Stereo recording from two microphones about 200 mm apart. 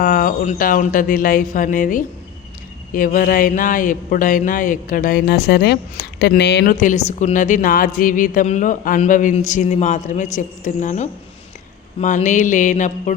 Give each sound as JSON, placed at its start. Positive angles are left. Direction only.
{"t": 0.0, "sound": "speech", "side_deg": 45}
{"t": 6.7, "sound": "a woman's voice", "side_deg": 40}